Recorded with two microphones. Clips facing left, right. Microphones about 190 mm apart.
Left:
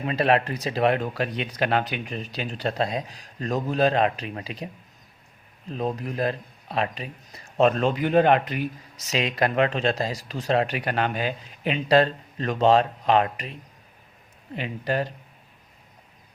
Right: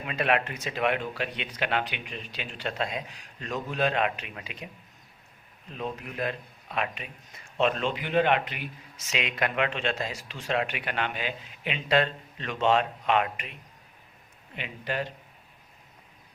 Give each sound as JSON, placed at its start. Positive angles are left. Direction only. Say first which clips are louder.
{"t": 0.0, "sound": "speech", "louder": "left 5 dB", "side_deg": 35}